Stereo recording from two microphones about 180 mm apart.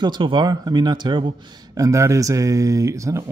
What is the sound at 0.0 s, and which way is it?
Speech, 25° right (ahead or behind).